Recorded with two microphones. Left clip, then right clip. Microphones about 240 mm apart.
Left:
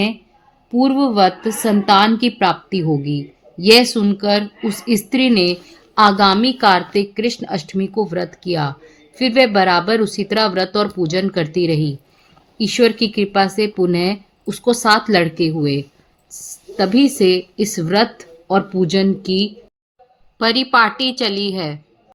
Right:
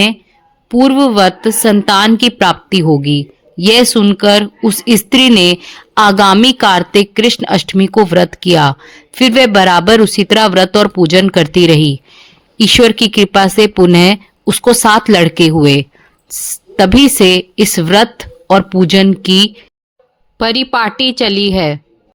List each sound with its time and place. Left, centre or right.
0.7 s a woman's voice: right
20.4 s a woman's voice: right